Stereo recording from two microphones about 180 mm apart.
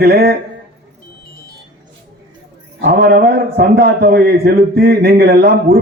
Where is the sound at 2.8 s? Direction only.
60° right (ahead or behind).